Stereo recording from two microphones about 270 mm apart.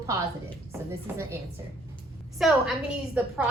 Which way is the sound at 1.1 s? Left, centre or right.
Centre.